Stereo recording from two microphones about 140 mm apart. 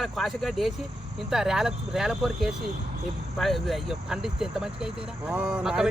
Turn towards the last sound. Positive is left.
turn(degrees=-5)  # may be behind; listen again after turning